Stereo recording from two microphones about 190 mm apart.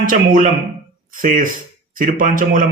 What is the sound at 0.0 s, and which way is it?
A man's voice, 45° right (ahead or behind).